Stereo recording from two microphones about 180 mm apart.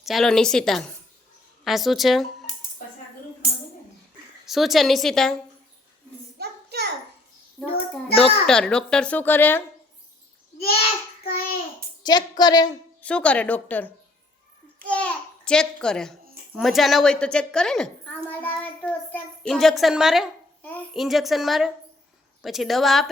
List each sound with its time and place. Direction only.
0.0 s a child's voice: centre (ahead or behind)
4.4 s a child's voice: centre (ahead or behind)
6.4 s a sound: 60° right (ahead or behind)
8.1 s a child's voice: 5° left (ahead or behind)
10.6 s a child's voice: 60° left (ahead or behind)
12.0 s a woman's voice: 25° left (ahead or behind)
13.0 s a woman's voice: 5° left (ahead or behind)
20.6 s babbling: 10° left (ahead or behind)
20.9 s a child's voice: centre (ahead or behind)